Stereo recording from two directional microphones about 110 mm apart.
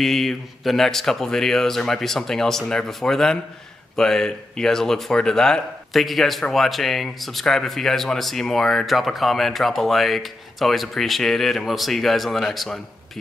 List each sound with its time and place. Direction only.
0.0 s speech: 5° left (ahead or behind)